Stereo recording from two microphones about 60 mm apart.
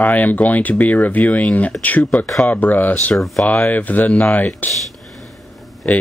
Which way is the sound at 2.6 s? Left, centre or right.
Left.